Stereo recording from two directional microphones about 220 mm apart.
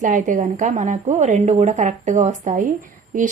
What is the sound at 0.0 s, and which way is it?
A woman's voice, 35° right (ahead or behind).